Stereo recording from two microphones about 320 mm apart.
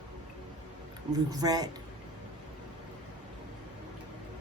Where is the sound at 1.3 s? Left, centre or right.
Centre.